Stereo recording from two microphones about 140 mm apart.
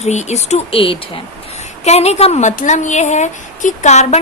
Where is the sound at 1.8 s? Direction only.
50° left (ahead or behind).